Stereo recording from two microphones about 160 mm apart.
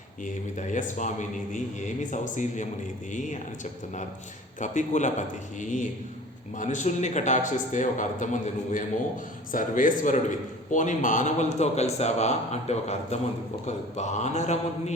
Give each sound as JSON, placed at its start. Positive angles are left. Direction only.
{"t": 0.3, "sound": "a man's voice", "side_deg": 50}